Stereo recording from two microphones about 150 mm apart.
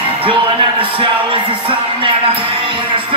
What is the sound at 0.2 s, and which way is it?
A man's voice, 35° right (ahead or behind).